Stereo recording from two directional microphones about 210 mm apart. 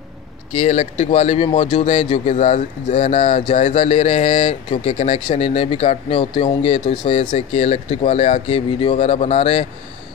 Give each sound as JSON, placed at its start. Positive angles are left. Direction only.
{"t": 0.5, "sound": "speech", "side_deg": 30}